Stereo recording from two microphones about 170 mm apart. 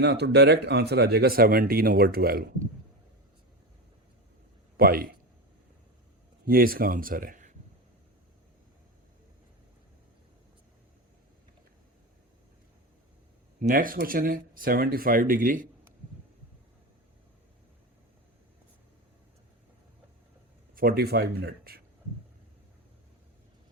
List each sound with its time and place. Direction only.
0.0 s speech: 85° right; by 2.6 s 60° right (ahead or behind)
4.8 s speech: 60° right (ahead or behind)
6.4 s speech: 60° right (ahead or behind)
13.6 s speech: 55° right (ahead or behind)
20.7 s speech: 65° right (ahead or behind)